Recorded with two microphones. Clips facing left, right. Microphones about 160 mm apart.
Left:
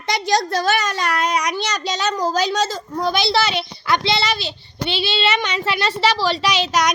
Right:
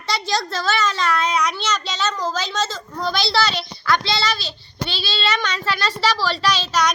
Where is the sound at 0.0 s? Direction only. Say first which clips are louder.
Left 4 dB; 15° left (ahead or behind).